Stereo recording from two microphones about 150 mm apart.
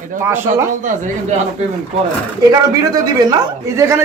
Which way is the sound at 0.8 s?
55° right (ahead or behind).